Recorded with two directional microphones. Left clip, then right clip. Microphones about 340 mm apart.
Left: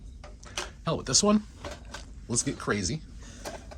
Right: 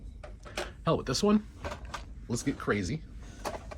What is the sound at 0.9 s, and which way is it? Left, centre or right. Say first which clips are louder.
Speech: left 2 dB; centre.